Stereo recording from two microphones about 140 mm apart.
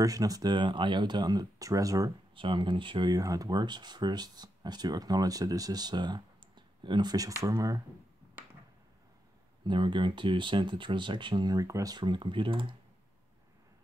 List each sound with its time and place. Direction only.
0.0 s speech: 25° right (ahead or behind)
2.3 s speech: 35° right (ahead or behind)
9.7 s speech: 35° right (ahead or behind)